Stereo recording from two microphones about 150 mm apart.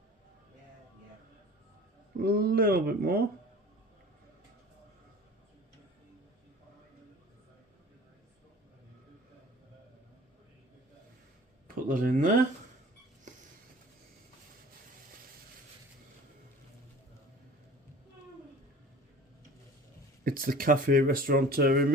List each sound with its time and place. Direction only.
2.1 s speech: 85° right
11.7 s a sound: 65° right (ahead or behind)
20.2 s speech: 75° right (ahead or behind); by 21.9 s 90° right